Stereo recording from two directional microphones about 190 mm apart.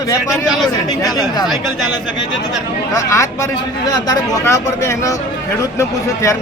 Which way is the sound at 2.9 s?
15° left (ahead or behind).